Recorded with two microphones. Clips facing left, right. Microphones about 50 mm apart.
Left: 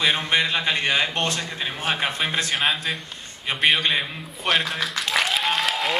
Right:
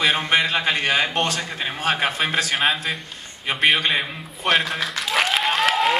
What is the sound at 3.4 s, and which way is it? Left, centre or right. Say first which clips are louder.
Applause: right 2 dB; centre.